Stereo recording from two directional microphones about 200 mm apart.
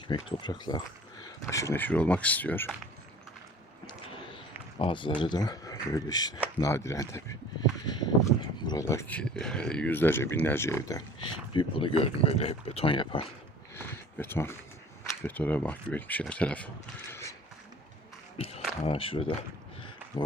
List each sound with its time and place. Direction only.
0.1 s speech: 20° left (ahead or behind)
4.8 s speech: 25° left (ahead or behind)
11.5 s speech: 30° left (ahead or behind)
13.7 s speech: 10° left (ahead or behind)
17.1 s a sound: 15° left (ahead or behind)
18.3 s a sound: 30° left (ahead or behind)
18.8 s speech: 30° left (ahead or behind)